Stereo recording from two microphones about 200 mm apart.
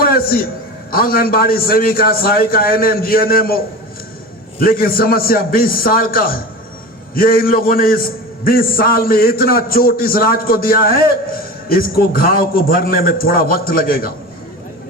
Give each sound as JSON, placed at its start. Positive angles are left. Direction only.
{"t": 0.0, "sound": "a sound", "side_deg": 45}
{"t": 0.9, "sound": "a man's voice", "side_deg": 45}
{"t": 4.6, "sound": "a man's voice", "side_deg": 45}